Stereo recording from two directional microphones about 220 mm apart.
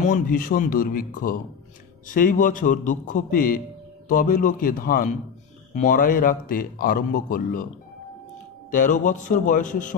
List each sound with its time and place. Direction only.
0.0 s speech: 40° left (ahead or behind)
8.6 s speech: 35° left (ahead or behind)